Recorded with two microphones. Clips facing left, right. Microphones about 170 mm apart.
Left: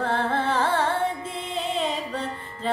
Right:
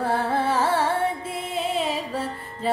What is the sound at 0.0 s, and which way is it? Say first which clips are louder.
Carnatic music: right 1 dB; 10° right (ahead or behind).